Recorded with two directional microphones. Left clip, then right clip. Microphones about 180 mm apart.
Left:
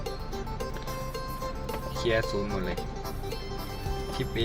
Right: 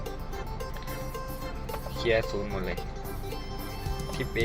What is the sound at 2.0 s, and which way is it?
Speech, 10° left (ahead or behind).